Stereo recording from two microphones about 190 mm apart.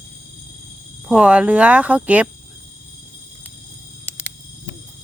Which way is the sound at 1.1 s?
5° right (ahead or behind).